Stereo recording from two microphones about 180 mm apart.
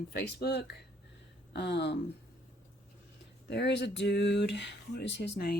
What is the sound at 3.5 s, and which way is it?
Speech, 70° left (ahead or behind).